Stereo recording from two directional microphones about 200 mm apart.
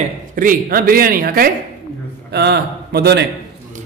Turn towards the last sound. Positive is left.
turn(degrees=-55)  # may be behind; listen again after turning